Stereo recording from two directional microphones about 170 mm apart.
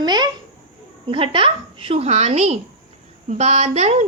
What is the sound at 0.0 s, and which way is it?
A child's voice, 25° right (ahead or behind).